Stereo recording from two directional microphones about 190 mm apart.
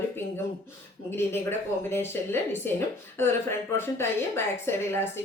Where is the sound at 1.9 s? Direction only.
10° left (ahead or behind).